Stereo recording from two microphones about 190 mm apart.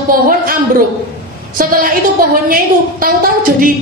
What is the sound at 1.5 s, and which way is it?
A woman's voice, 50° right (ahead or behind).